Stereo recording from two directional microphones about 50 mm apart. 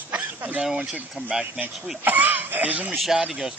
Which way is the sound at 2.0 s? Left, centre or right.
Right.